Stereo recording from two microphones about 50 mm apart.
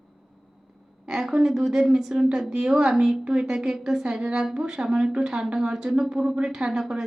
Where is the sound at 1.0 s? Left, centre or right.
Centre.